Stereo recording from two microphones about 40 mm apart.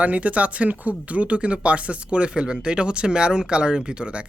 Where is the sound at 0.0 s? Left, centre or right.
Right.